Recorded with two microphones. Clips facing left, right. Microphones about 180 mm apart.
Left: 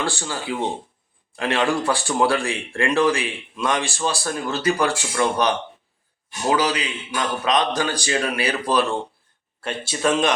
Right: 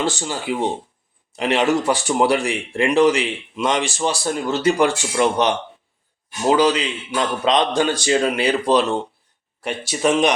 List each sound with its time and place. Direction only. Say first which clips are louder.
0.0 s speech: right 3 dB; 20° right (ahead or behind)